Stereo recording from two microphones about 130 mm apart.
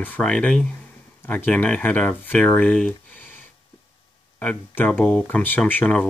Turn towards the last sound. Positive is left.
turn(degrees=10)  # may be behind; listen again after turning